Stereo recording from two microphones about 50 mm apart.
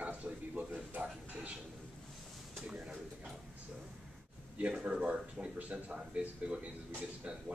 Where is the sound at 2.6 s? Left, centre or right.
Centre.